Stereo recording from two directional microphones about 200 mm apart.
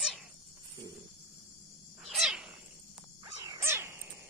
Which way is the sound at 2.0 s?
Centre (ahead or behind).